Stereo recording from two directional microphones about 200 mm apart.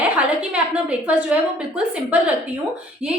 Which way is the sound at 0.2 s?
5° right (ahead or behind).